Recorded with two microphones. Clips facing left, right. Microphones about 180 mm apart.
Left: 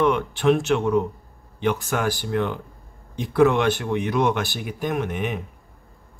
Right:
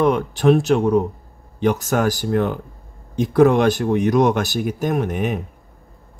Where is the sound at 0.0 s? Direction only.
40° right (ahead or behind).